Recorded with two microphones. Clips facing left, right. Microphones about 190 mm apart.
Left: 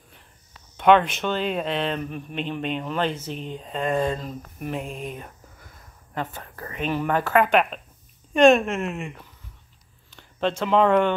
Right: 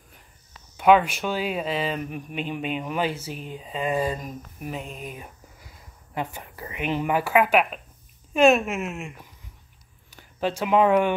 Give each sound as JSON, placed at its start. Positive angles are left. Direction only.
{"t": 0.7, "sound": "speech", "side_deg": -5}
{"t": 10.6, "sound": "speech", "side_deg": -10}